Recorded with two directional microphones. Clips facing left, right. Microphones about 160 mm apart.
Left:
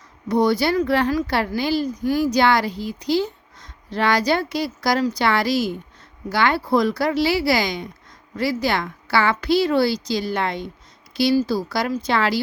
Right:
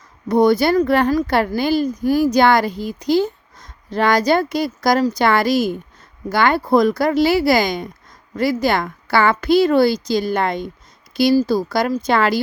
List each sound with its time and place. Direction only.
0.3 s speech: 50° right (ahead or behind)